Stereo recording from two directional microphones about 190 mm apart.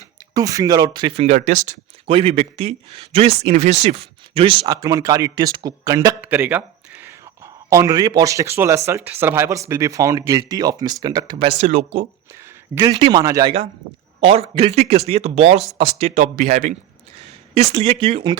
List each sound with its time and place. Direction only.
0.3 s speech: 20° right (ahead or behind)
12.7 s speech: 20° right (ahead or behind)
14.2 s speech: 30° right (ahead or behind)